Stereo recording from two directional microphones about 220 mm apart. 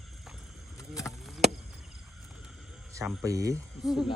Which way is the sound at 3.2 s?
15° right (ahead or behind).